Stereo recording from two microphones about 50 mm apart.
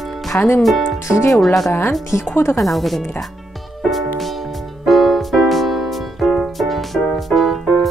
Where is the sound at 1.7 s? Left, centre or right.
Left.